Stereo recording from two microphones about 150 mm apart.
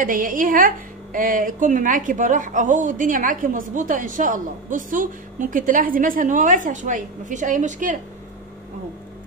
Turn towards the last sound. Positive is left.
turn(degrees=-55)  # may be behind; listen again after turning